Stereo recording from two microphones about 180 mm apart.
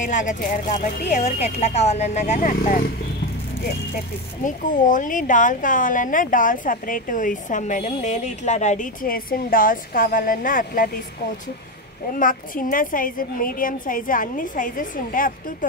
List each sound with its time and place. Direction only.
0.0 s speech: 45° left (ahead or behind)
4.5 s speech: 45° left (ahead or behind)
12.2 s speech: 50° left (ahead or behind)